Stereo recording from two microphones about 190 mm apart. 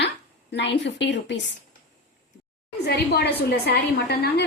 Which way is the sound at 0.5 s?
65° left (ahead or behind).